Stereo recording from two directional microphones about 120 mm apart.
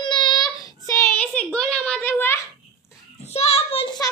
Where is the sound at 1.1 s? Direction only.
10° left (ahead or behind).